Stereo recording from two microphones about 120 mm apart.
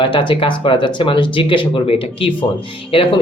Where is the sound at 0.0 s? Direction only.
45° left (ahead or behind).